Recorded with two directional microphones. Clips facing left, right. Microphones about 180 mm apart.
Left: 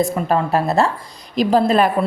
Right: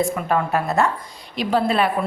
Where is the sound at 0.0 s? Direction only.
35° left (ahead or behind).